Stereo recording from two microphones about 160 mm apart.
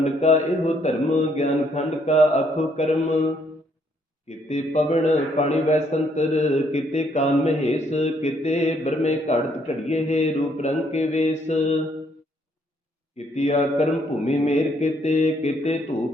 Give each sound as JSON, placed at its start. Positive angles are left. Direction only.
{"t": 0.0, "sound": "a man's voice", "side_deg": 45}
{"t": 4.3, "sound": "a man's voice", "side_deg": 45}
{"t": 13.1, "sound": "a man's voice", "side_deg": 45}